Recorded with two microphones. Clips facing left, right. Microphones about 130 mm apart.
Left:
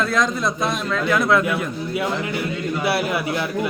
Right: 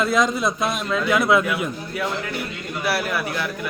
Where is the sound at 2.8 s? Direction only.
20° left (ahead or behind).